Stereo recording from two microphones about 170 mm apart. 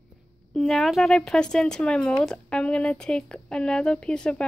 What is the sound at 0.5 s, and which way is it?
Speech, 5° left (ahead or behind).